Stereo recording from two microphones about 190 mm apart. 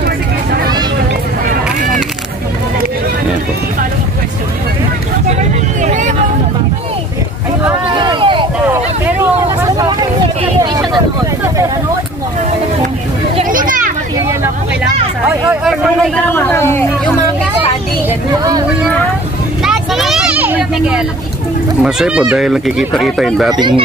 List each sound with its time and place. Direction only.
0.0 s vehicle: 55° right (ahead or behind)
5.4 s vehicle: 40° right (ahead or behind)
7.9 s vehicle: 25° right (ahead or behind)
8.6 s vehicle: 10° right (ahead or behind)
13.5 s a sound: 45° right (ahead or behind)
15.2 s a sound: 5° right (ahead or behind)
16.3 s chatter: 10° left (ahead or behind)
19.6 s vehicle: centre (ahead or behind)
21.8 s speech: 5° right (ahead or behind)